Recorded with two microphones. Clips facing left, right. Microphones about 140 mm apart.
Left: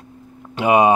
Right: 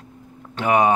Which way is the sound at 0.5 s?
15° left (ahead or behind).